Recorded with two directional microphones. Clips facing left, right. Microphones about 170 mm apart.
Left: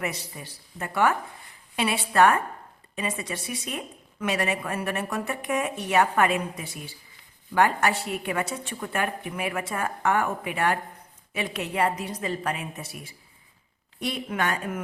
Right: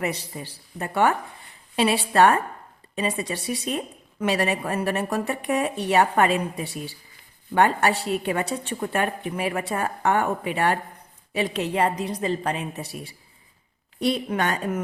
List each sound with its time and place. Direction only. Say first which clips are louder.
0.0 s speech: right 4 dB; 30° right (ahead or behind)